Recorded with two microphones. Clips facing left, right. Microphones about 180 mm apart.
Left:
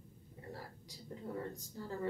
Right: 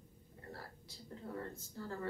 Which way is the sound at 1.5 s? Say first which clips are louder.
Left 1 dB; 15° left (ahead or behind).